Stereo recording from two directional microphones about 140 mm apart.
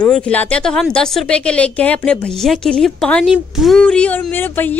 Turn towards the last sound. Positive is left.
turn(degrees=15)  # may be behind; listen again after turning